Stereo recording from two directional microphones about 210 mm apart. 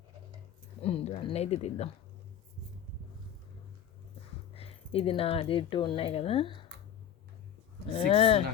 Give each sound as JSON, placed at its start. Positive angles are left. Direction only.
{"t": 0.8, "sound": "speech", "side_deg": 30}
{"t": 4.5, "sound": "speech", "side_deg": 30}
{"t": 7.9, "sound": "speech", "side_deg": 25}